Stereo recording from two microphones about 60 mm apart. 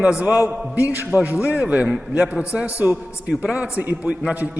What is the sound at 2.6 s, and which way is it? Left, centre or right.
Speech, right.